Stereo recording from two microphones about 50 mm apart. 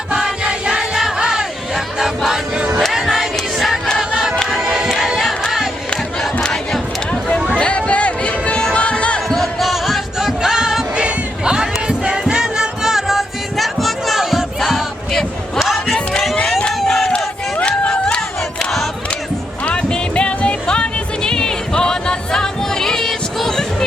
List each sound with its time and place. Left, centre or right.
0.1 s music: centre
2.6 s music: right
2.9 s music: centre
6.4 s crowd: centre
7.5 s music: left
9.3 s music: centre
15.5 s a sound: centre
16.8 s crowd: centre
17.6 s crowd: left
18.6 s crowd: centre
19.6 s music: left